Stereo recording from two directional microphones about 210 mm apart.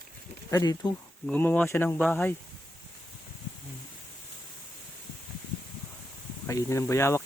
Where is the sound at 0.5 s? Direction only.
15° left (ahead or behind).